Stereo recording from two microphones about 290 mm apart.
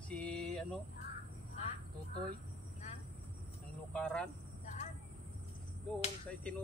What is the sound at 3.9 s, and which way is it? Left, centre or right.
Speech, centre.